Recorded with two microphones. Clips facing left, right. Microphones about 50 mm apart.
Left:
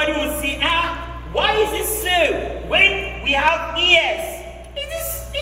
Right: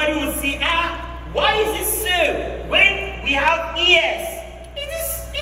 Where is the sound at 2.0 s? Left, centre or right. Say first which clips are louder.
Left 1 dB; left.